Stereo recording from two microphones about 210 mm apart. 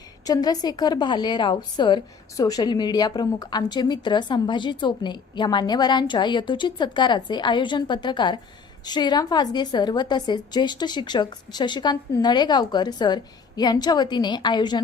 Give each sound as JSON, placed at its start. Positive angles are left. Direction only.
{"t": 0.3, "sound": "a woman's voice", "side_deg": 20}